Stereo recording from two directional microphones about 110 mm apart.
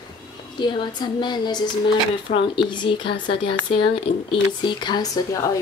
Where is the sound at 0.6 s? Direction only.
45° left (ahead or behind).